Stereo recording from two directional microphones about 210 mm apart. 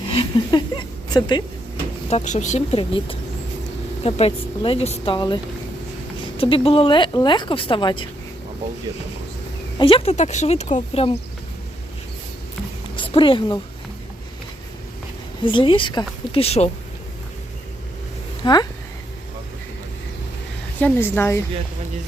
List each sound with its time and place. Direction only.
0.1 s speech: 25° left (ahead or behind)
2.0 s speech: 35° left (ahead or behind)
9.7 s speech: 25° left (ahead or behind)
13.0 s speech: 25° left (ahead or behind)
15.4 s speech: 25° left (ahead or behind)
18.4 s speech: 20° left (ahead or behind)
20.7 s a woman's voice: 10° left (ahead or behind)